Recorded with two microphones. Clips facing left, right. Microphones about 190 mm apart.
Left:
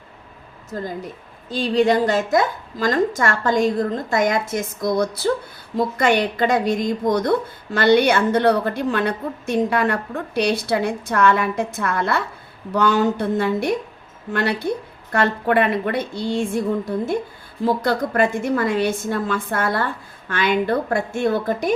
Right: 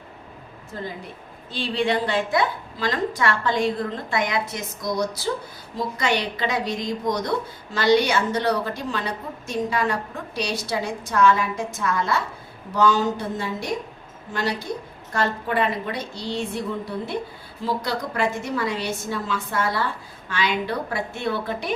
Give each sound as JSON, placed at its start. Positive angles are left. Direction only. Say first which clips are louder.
{"t": 0.7, "sound": "a woman's voice", "louder": "left 5 dB", "side_deg": 45}
{"t": 15.1, "sound": "a woman's voice", "louder": "left 6 dB", "side_deg": 60}